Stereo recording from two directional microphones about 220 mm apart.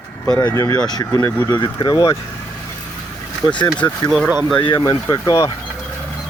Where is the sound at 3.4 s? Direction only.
20° left (ahead or behind).